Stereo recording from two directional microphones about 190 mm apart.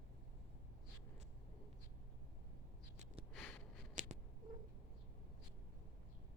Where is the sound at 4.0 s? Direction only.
40° right (ahead or behind).